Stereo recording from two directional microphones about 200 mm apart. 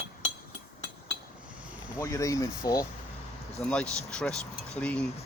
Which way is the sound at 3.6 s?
5° left (ahead or behind).